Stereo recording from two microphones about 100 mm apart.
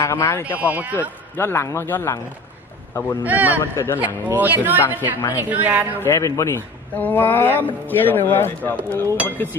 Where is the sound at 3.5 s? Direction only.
30° left (ahead or behind).